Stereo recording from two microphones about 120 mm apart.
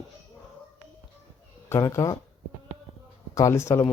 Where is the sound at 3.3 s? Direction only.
25° left (ahead or behind).